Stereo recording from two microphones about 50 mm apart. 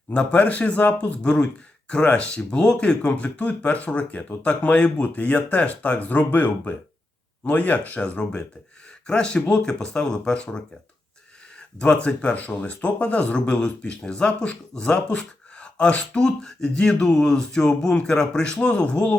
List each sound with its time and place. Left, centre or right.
0.1 s speech: left
11.8 s speech: left